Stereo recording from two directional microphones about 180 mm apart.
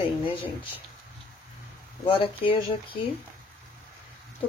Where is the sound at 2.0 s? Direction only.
30° left (ahead or behind).